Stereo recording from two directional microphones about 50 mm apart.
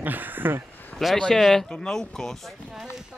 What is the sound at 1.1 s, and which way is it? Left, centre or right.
Speech, centre.